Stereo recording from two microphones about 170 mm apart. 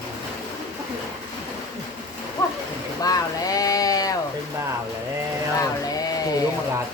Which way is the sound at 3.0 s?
20° left (ahead or behind).